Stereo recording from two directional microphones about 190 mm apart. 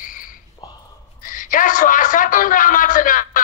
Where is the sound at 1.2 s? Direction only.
45° left (ahead or behind).